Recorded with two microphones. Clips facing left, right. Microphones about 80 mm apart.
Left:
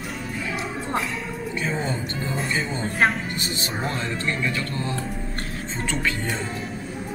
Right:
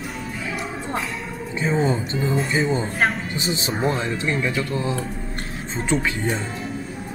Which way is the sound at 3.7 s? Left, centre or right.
Centre.